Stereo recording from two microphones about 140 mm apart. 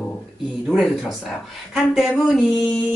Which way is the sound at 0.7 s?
5° right (ahead or behind).